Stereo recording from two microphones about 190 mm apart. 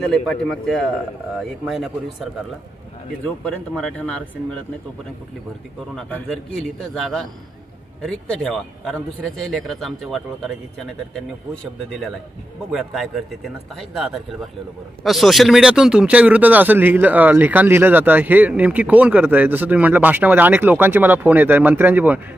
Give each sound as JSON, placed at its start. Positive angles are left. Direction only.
{"t": 0.0, "sound": "a man's voice", "side_deg": 5}
{"t": 3.4, "sound": "a man's voice", "side_deg": 5}
{"t": 5.9, "sound": "a man's voice", "side_deg": 5}